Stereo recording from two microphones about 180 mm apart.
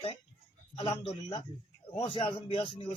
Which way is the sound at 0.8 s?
25° left (ahead or behind).